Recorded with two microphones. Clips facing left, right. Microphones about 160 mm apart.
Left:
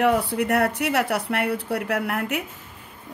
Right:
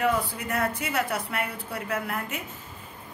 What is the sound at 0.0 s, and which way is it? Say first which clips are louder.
A woman's voice: left 6 dB; 65° left (ahead or behind).